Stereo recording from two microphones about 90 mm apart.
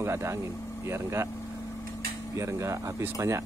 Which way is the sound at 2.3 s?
35° right (ahead or behind).